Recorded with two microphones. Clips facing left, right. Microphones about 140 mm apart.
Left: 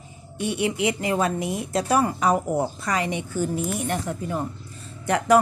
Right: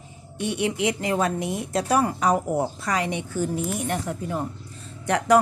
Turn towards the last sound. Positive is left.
turn(degrees=5)  # may be behind; listen again after turning